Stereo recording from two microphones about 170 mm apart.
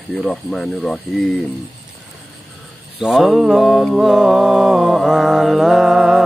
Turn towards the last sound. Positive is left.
turn(degrees=0)  # may be behind; listen again after turning